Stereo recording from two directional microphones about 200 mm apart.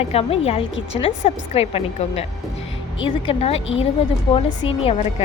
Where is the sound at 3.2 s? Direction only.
30° left (ahead or behind).